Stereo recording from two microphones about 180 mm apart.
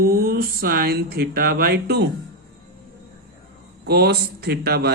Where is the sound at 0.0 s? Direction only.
55° right (ahead or behind).